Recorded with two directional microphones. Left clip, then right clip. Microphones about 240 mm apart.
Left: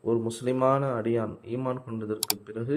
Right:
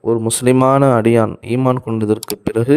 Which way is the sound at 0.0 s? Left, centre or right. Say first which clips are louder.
Right 12 dB; right.